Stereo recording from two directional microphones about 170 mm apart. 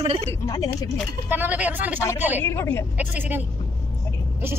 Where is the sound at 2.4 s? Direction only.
15° left (ahead or behind).